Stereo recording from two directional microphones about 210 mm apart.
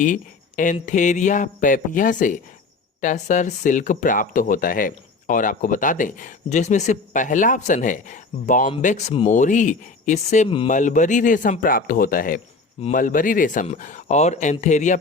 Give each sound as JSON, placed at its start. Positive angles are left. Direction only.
{"t": 0.0, "sound": "speech", "side_deg": 40}